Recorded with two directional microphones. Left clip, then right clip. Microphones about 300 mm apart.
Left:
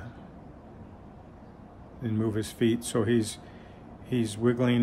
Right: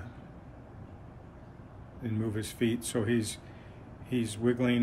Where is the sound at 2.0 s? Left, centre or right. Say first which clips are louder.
Left 5 dB; centre.